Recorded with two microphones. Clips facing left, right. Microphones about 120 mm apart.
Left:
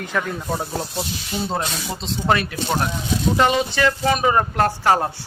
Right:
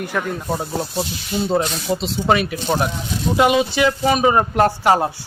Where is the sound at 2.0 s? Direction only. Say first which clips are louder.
Right 1 dB; 10° right (ahead or behind).